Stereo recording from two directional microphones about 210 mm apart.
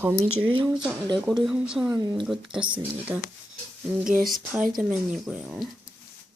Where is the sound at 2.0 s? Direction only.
20° right (ahead or behind).